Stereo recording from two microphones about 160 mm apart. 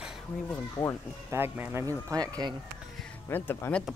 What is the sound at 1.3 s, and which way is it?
Speech, 15° right (ahead or behind).